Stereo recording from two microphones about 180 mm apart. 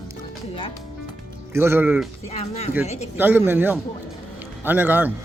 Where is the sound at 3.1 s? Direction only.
10° right (ahead or behind).